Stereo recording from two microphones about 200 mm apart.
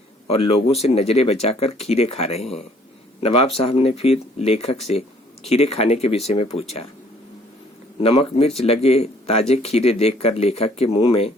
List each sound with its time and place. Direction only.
0.3 s speech: 30° left (ahead or behind)
8.0 s speech: 30° left (ahead or behind)